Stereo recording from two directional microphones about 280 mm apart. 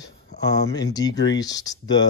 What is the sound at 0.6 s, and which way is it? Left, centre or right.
Speech, centre.